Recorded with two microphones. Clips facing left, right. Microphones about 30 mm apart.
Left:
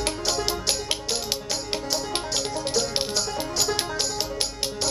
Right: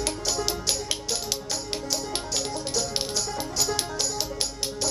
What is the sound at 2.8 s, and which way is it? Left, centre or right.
Music, left.